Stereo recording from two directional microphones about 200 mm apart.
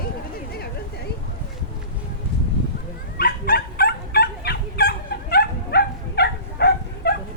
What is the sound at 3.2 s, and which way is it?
Dog, 50° left (ahead or behind).